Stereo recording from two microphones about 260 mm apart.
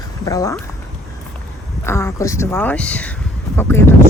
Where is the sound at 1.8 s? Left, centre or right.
Centre.